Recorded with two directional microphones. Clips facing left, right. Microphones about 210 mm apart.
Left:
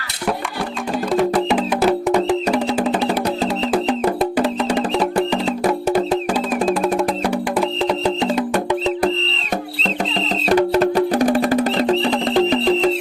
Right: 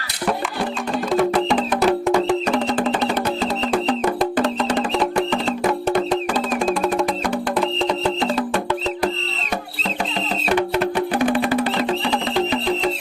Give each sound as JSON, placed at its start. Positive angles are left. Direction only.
{"t": 1.1, "sound": "music", "side_deg": 5}
{"t": 6.7, "sound": "music", "side_deg": 5}
{"t": 9.8, "sound": "music", "side_deg": 40}